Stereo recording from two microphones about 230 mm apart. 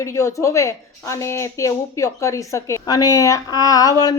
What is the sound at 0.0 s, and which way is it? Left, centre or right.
A woman's voice, centre.